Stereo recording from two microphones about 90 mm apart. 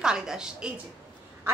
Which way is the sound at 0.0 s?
10° right (ahead or behind).